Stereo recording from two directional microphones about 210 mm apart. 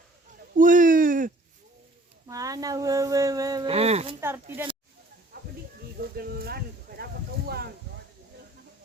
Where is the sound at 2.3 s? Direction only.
15° right (ahead or behind).